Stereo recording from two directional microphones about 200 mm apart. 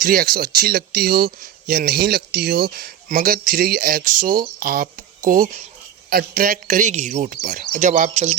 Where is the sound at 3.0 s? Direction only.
40° right (ahead or behind).